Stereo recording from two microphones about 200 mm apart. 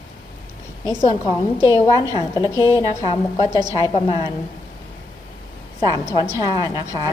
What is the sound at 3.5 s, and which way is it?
Speech, 20° right (ahead or behind).